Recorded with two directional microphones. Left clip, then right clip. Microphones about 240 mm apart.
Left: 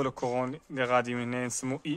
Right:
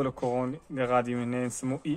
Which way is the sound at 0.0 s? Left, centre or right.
Left.